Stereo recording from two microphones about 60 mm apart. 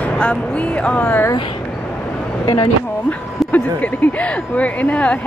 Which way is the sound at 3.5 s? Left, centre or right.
Left.